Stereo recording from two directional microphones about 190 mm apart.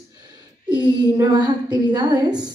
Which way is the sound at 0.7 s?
20° right (ahead or behind).